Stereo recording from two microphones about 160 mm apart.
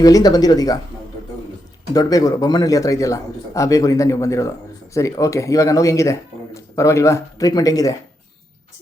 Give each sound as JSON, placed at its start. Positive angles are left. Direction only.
{"t": 0.0, "sound": "speech", "side_deg": 25}
{"t": 1.9, "sound": "speech", "side_deg": 25}